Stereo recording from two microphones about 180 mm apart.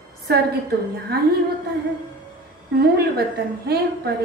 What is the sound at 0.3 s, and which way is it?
Speech, 60° right (ahead or behind).